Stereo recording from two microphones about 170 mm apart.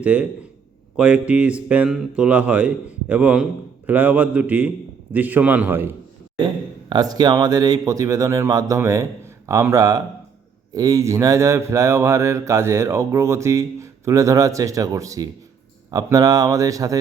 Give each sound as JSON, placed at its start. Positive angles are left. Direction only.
{"t": 0.0, "sound": "speech", "side_deg": -10}